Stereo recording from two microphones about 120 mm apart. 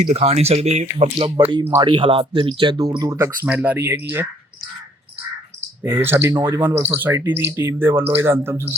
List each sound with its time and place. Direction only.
0.0 s speech: 70° right (ahead or behind); by 1.3 s 55° right (ahead or behind)
1.8 s speech: 45° right (ahead or behind)
2.6 s speech: 35° right (ahead or behind)
3.4 s speech: 10° right (ahead or behind)
5.8 s speech: 20° right (ahead or behind)